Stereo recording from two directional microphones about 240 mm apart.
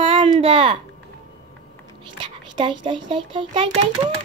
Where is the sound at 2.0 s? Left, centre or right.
Centre.